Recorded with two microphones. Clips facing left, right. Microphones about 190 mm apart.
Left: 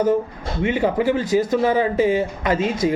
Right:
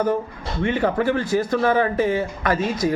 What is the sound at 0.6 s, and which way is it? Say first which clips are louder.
A man's voice: left 1 dB; 15° left (ahead or behind).